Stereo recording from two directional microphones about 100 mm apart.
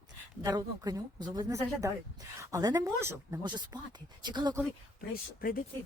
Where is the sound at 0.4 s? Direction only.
35° right (ahead or behind).